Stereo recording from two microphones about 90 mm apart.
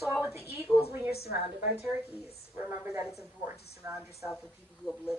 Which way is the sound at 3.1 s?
30° right (ahead or behind).